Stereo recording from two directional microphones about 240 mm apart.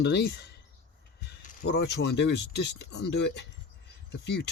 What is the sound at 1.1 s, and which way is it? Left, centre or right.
Speech, left.